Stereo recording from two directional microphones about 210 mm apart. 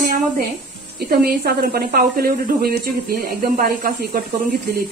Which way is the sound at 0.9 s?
45° right (ahead or behind).